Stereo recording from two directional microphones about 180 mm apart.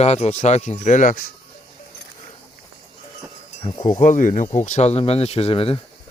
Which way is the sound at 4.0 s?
45° left (ahead or behind).